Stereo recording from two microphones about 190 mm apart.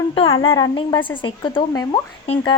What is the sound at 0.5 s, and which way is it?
A woman's voice, 20° left (ahead or behind).